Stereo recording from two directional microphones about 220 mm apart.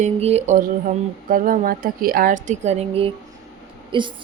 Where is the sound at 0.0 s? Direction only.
30° right (ahead or behind).